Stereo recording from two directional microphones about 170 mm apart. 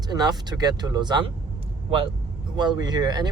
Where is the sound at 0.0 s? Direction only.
25° right (ahead or behind).